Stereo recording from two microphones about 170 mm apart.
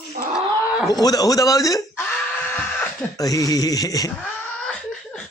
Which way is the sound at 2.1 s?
5° left (ahead or behind).